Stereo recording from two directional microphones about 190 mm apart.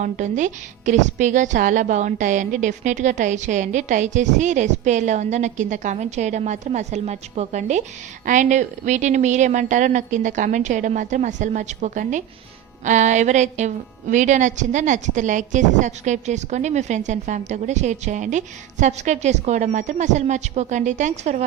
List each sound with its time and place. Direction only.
0.0 s speech: 40° right (ahead or behind)